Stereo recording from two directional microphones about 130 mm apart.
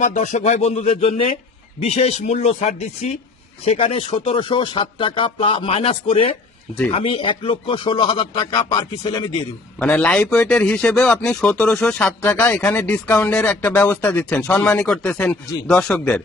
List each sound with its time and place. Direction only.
0.0 s speech: 75° left (ahead or behind); by 9.3 s 35° left (ahead or behind)
9.7 s a man's voice: 10° left (ahead or behind)